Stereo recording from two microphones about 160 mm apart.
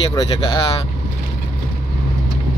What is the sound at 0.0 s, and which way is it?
Speech, 25° left (ahead or behind).